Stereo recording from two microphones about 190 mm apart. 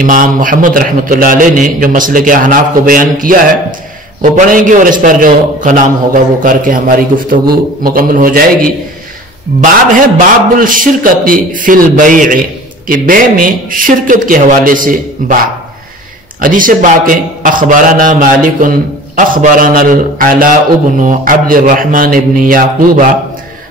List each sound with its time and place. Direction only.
0.0 s a man's voice: 45° right (ahead or behind)